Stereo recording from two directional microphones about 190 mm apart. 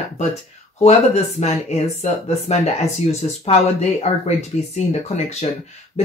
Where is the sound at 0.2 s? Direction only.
35° left (ahead or behind).